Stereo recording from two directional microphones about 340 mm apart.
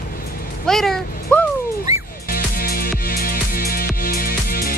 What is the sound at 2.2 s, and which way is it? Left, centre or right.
Music, left.